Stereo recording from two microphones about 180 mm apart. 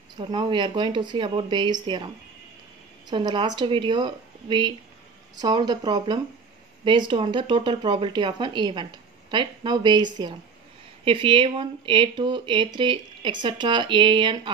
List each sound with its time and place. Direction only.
0.2 s speech: 25° right (ahead or behind)
3.1 s speech: 25° right (ahead or behind)
11.1 s speech: 30° right (ahead or behind)